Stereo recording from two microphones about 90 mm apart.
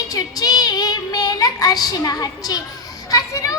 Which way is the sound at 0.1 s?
45° left (ahead or behind).